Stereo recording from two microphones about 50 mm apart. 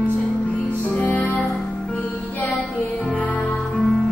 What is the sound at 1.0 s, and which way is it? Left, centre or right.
Music, left.